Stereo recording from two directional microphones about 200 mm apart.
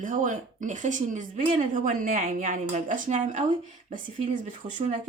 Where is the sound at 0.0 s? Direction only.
40° right (ahead or behind).